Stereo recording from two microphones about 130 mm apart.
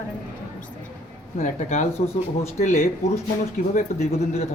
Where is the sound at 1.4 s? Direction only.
60° left (ahead or behind).